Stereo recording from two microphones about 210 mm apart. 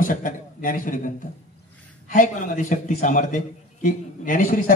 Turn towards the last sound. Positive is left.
turn(degrees=40)  # may be behind; listen again after turning